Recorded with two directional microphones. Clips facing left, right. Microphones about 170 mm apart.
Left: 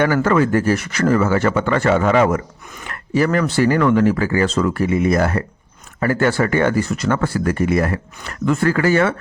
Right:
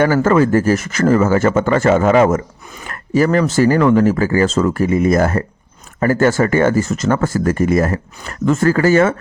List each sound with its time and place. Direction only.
0.0 s speech: 40° right (ahead or behind)